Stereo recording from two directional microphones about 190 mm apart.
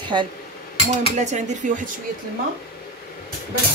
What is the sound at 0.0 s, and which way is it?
Speech, 25° right (ahead or behind).